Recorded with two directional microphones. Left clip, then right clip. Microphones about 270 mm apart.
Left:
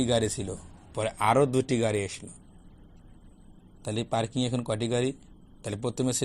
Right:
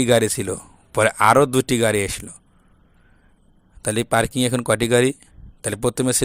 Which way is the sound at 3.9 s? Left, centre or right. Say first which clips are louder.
Right 10 dB; right.